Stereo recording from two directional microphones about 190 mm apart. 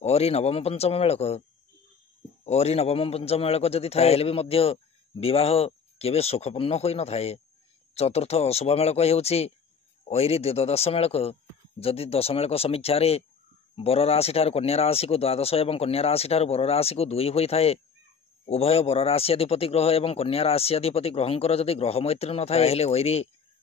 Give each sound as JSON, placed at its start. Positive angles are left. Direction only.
{"t": 0.0, "sound": "a man's voice", "side_deg": 35}
{"t": 2.4, "sound": "a man's voice", "side_deg": 35}